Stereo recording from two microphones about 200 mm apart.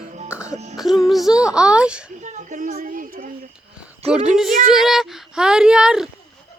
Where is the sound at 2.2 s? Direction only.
40° right (ahead or behind).